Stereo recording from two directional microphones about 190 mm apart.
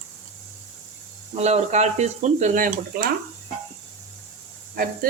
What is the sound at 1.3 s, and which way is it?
Speech, 35° right (ahead or behind).